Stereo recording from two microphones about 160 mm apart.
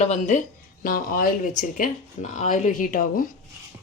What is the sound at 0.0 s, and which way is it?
A woman's voice, 45° left (ahead or behind).